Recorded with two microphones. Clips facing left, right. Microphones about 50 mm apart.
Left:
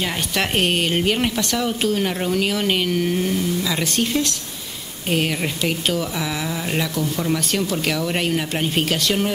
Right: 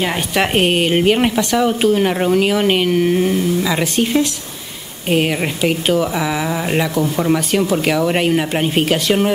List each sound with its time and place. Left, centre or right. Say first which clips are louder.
0.0 s speech: right 5 dB; centre